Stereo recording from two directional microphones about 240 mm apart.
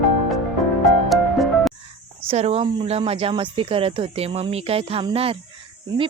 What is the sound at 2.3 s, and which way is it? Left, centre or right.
Speech, right.